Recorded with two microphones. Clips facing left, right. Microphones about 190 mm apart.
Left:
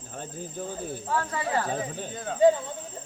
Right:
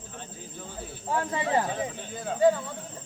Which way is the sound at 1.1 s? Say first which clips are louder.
Right 2 dB; 20° right (ahead or behind).